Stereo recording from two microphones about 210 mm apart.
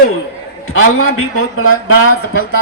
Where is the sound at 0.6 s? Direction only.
80° left.